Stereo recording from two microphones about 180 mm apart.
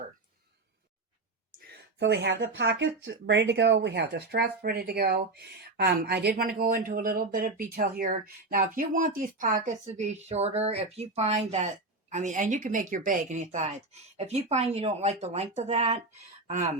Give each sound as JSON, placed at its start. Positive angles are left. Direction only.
{"t": 1.6, "sound": "a woman's voice", "side_deg": -70}